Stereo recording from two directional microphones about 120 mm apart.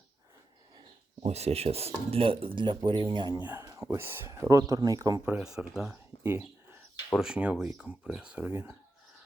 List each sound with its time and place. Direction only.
1.2 s speech: 60° right (ahead or behind); by 3.3 s 40° right (ahead or behind)
3.3 s speech: 15° right (ahead or behind)
3.6 s speech: 25° right (ahead or behind)
5.2 s speech: 10° right (ahead or behind)
6.2 s bird: 20° right (ahead or behind)
7.1 s speech: 5° right (ahead or behind)